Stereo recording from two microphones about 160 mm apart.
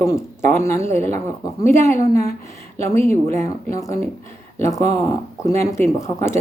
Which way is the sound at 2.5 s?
15° left (ahead or behind).